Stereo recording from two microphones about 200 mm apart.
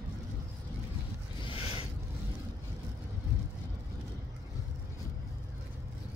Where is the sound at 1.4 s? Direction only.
25° left (ahead or behind).